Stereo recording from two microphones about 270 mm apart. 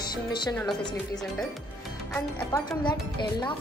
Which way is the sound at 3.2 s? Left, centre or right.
Centre.